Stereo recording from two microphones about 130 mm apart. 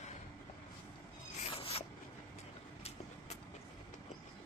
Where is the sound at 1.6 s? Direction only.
50° left (ahead or behind).